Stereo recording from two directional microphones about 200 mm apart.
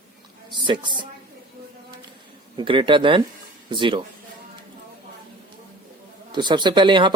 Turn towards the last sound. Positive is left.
turn(degrees=-25)  # may be behind; listen again after turning